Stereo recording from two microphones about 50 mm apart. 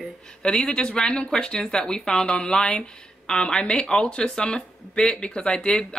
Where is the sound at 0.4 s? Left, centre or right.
Centre.